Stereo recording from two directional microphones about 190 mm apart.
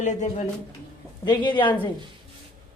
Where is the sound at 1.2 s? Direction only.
25° left (ahead or behind).